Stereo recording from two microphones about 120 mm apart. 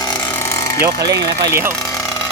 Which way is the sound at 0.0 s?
35° left (ahead or behind).